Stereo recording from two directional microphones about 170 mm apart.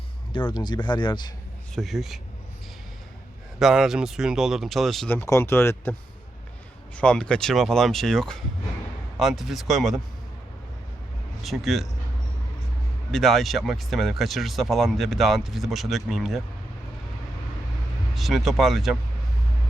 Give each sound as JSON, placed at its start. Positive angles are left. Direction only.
{"t": 0.3, "sound": "speech", "side_deg": 30}
{"t": 1.7, "sound": "speech", "side_deg": 0}
{"t": 3.6, "sound": "speech", "side_deg": 0}
{"t": 5.3, "sound": "speech", "side_deg": 15}
{"t": 6.9, "sound": "speech", "side_deg": 5}
{"t": 11.4, "sound": "speech", "side_deg": 0}
{"t": 13.1, "sound": "speech", "side_deg": 0}
{"t": 18.1, "sound": "speech", "side_deg": 0}